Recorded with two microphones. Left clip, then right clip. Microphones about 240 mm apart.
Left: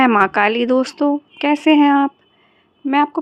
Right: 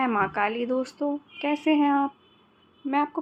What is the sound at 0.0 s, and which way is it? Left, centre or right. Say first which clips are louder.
A woman's voice: left 11 dB; left.